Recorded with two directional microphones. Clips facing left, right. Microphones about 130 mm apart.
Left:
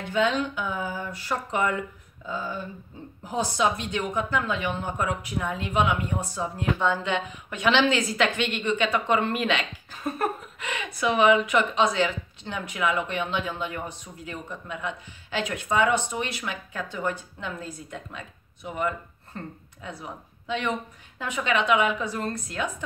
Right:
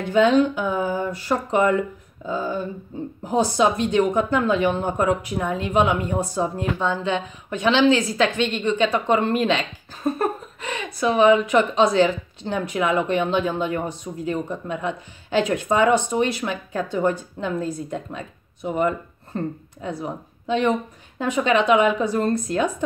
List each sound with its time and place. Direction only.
0.1 s a woman's voice: 40° right (ahead or behind)
6.8 s a woman's voice: 25° right (ahead or behind)